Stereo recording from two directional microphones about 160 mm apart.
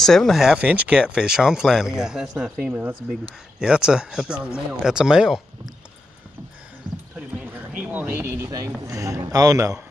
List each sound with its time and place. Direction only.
0.0 s speech: 5° left (ahead or behind)
7.2 s a sound: 10° right (ahead or behind)
8.8 s a man's voice: 20° right (ahead or behind)